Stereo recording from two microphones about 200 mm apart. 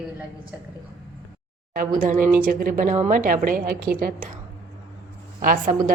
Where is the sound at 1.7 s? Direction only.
40° right (ahead or behind).